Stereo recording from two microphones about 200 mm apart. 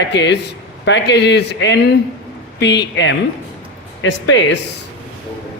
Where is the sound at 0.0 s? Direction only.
60° left (ahead or behind).